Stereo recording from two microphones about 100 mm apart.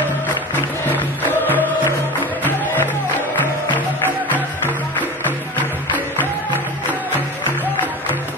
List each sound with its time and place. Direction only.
0.8 s music: 20° left (ahead or behind)